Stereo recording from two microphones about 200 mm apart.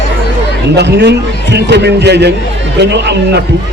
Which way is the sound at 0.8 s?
60° right (ahead or behind).